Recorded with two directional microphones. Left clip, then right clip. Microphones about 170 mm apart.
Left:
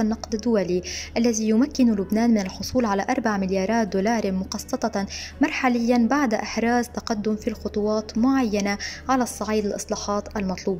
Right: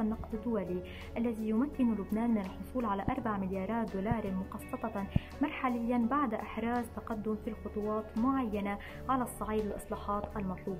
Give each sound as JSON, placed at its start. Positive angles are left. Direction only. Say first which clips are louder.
{"t": 0.0, "sound": "speech", "louder": "left 12 dB", "side_deg": 45}